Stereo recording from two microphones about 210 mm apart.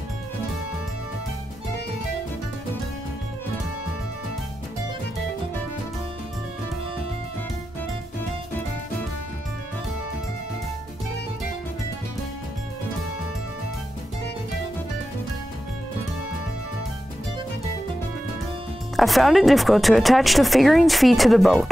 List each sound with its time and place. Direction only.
18.9 s speech: centre (ahead or behind)